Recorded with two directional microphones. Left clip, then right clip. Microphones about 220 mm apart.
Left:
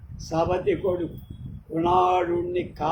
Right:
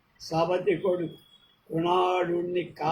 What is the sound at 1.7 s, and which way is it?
Speech, 15° left (ahead or behind).